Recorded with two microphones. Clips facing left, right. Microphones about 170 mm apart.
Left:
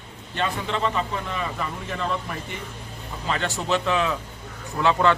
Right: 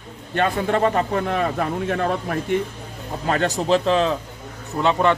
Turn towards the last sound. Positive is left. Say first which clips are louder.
# right 2 dB
turn(degrees=-20)  # may be behind; listen again after turning